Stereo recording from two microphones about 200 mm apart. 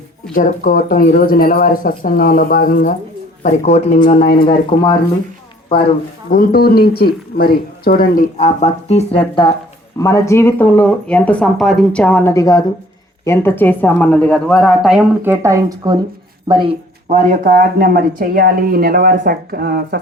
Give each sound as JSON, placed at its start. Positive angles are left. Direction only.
{"t": 0.3, "sound": "speech", "side_deg": 45}
{"t": 6.3, "sound": "speech", "side_deg": 45}